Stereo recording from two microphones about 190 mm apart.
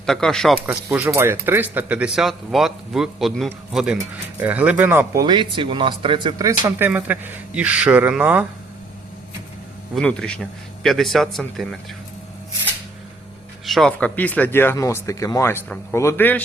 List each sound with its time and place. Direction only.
0.0 s speech: 5° left (ahead or behind)
0.9 s speech: 10° right (ahead or behind)
5.2 s speech: 20° right (ahead or behind)
9.9 s speech: 5° left (ahead or behind)
13.7 s speech: centre (ahead or behind)